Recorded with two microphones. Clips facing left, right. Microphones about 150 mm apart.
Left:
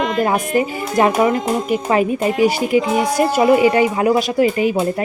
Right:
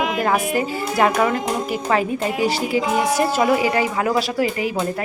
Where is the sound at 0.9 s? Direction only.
20° left (ahead or behind).